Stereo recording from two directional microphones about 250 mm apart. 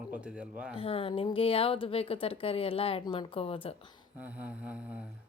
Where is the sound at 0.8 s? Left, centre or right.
Left.